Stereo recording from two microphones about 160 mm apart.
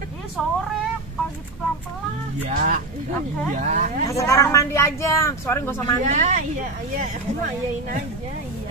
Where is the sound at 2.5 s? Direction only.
55° right (ahead or behind).